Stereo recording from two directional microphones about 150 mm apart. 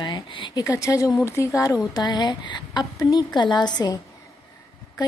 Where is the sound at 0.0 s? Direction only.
30° left (ahead or behind).